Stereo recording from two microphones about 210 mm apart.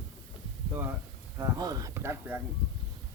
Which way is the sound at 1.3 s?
15° right (ahead or behind).